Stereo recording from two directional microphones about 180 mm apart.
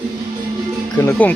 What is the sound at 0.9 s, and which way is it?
Speech, 15° left (ahead or behind).